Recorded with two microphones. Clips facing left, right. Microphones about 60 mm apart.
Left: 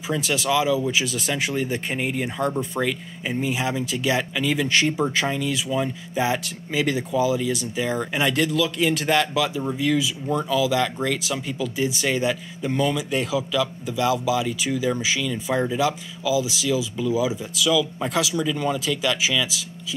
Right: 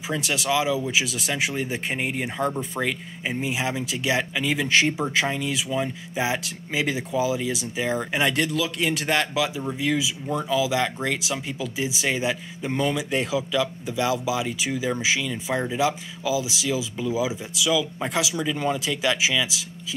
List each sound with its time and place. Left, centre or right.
0.1 s speech: centre
12.7 s speech: right